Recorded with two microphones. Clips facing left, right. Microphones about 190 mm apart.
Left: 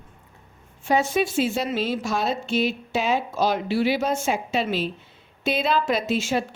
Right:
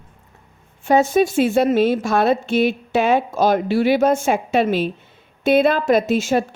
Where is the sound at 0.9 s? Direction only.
45° right (ahead or behind).